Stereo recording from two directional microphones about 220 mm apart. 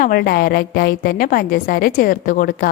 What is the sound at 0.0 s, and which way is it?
A woman's voice, 40° left (ahead or behind).